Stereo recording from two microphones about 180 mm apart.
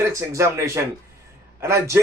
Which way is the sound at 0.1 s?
15° right (ahead or behind).